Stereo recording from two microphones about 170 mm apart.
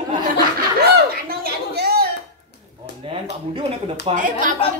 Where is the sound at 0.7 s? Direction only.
70° right (ahead or behind).